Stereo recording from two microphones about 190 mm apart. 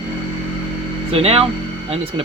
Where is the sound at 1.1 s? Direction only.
30° right (ahead or behind).